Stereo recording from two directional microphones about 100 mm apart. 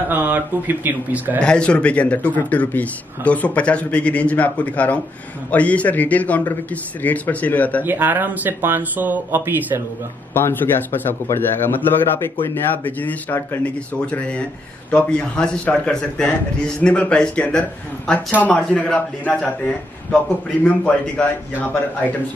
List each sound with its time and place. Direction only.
0.1 s speech: 20° right (ahead or behind)
1.4 s speech: 10° left (ahead or behind)
7.8 s speech: 20° right (ahead or behind)
10.3 s speech: 20° left (ahead or behind)